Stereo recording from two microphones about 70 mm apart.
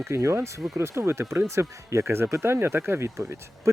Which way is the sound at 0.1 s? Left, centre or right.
Right.